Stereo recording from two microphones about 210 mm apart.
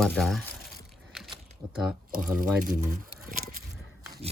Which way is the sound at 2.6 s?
40° right (ahead or behind).